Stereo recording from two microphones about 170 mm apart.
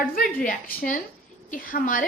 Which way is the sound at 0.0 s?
55° left (ahead or behind).